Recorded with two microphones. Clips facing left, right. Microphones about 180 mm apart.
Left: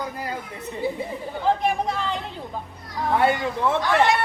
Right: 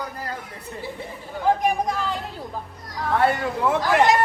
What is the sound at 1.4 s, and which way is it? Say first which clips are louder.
Speech: right 1 dB; 10° right (ahead or behind).